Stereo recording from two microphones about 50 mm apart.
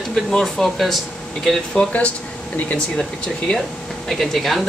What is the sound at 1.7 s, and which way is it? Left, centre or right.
Speech, left.